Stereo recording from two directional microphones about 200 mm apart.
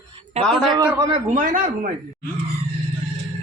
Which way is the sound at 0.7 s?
20° right (ahead or behind).